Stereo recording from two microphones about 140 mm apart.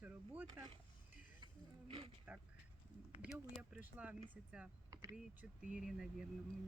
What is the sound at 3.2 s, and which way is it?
Speech, 5° right (ahead or behind).